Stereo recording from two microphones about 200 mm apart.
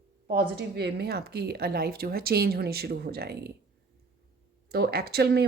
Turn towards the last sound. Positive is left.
turn(degrees=-55)  # may be behind; listen again after turning